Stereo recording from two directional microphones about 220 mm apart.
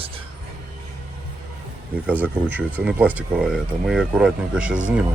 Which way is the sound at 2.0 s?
5° right (ahead or behind).